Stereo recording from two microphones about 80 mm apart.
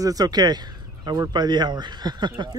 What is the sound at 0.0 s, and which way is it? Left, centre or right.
Speech, right.